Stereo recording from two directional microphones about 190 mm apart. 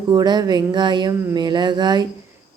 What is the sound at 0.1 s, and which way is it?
Speech, 20° right (ahead or behind).